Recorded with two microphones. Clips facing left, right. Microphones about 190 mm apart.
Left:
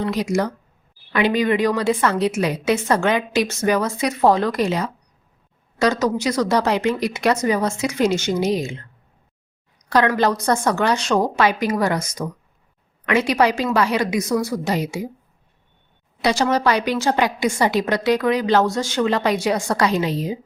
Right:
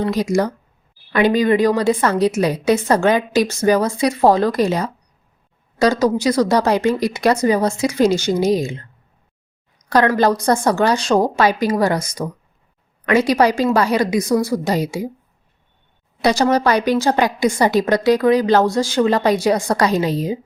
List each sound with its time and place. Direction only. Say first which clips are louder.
0.0 s a woman's voice: right 3 dB; 35° right (ahead or behind)
10.1 s a woman's voice: right 3 dB; 35° right (ahead or behind)
16.2 s a woman's voice: right 3 dB; 40° right (ahead or behind)